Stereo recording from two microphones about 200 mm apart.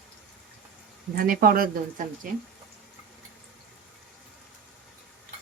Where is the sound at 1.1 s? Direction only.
45° right (ahead or behind).